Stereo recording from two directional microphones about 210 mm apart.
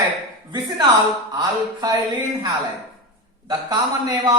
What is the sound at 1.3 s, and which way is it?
A man's voice, 20° right (ahead or behind).